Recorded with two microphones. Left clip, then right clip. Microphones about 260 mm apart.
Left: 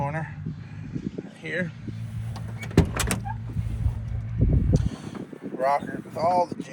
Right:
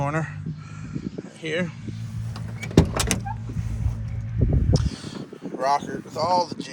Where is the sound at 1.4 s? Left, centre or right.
Centre.